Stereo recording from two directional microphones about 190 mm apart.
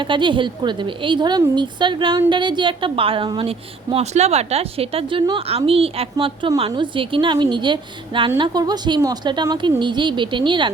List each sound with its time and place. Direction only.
0.0 s a woman's voice: 25° right (ahead or behind)